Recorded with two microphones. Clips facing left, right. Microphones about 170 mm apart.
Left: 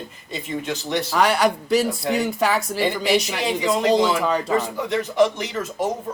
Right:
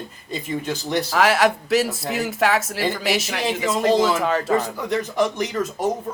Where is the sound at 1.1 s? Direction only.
Centre (ahead or behind).